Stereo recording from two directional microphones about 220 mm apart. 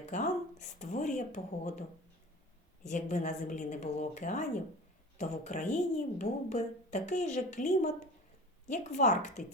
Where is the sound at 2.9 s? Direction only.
35° left (ahead or behind).